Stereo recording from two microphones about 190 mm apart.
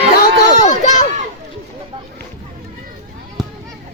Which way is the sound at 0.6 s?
40° left (ahead or behind).